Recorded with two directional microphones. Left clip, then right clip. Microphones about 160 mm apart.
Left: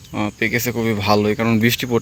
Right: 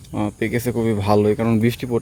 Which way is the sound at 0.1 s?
15° right (ahead or behind).